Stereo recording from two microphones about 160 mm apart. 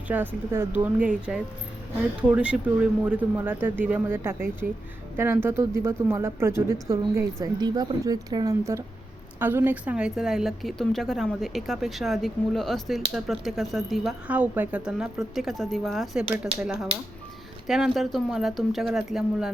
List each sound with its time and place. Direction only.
0.1 s a woman's voice: 15° right (ahead or behind)